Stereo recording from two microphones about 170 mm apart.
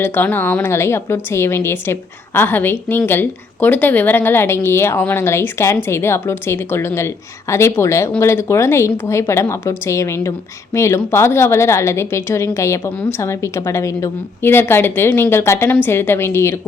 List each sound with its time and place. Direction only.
0.0 s a woman's voice: 10° left (ahead or behind)